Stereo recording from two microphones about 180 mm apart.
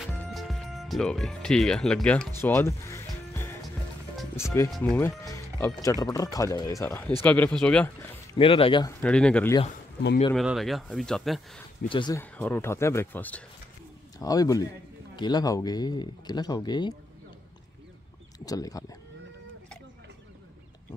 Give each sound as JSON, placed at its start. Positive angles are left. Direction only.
{"t": 0.3, "sound": "speech", "side_deg": 0}
{"t": 2.4, "sound": "music", "side_deg": 15}
{"t": 4.4, "sound": "speech", "side_deg": 15}
{"t": 4.6, "sound": "speech", "side_deg": 5}
{"t": 8.4, "sound": "speech", "side_deg": 30}
{"t": 9.0, "sound": "speech", "side_deg": 5}
{"t": 11.9, "sound": "speech", "side_deg": 25}
{"t": 12.2, "sound": "speech", "side_deg": 10}
{"t": 14.1, "sound": "speech", "side_deg": 20}
{"t": 18.4, "sound": "speech", "side_deg": 20}